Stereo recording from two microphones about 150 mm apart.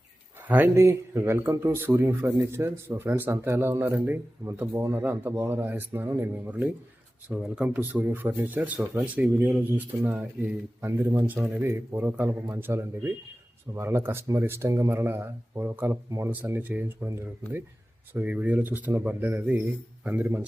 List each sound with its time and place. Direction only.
0.4 s speech: 10° right (ahead or behind)
18.1 s speech: 10° right (ahead or behind)